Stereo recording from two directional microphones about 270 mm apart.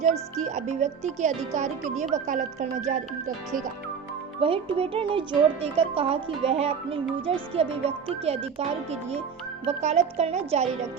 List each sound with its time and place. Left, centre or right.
0.4 s speech: right
4.4 s speech: centre